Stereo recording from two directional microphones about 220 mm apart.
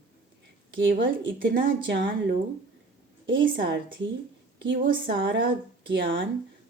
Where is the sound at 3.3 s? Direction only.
55° right (ahead or behind).